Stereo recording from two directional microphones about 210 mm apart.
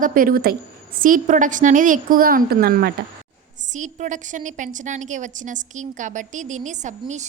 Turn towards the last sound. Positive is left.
turn(degrees=-35)  # may be behind; listen again after turning